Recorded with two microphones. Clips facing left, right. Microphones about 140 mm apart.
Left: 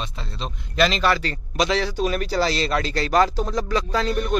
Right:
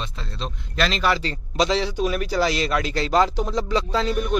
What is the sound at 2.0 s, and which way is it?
Speech, 5° right (ahead or behind).